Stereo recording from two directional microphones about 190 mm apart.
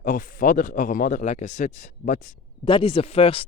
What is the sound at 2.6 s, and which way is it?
Speech, 25° left (ahead or behind).